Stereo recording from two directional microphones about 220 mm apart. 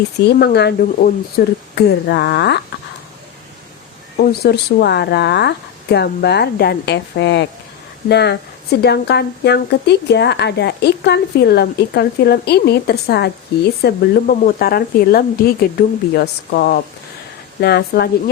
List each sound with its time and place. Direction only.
0.3 s speech: 45° left (ahead or behind)
4.2 s speech: 45° left (ahead or behind)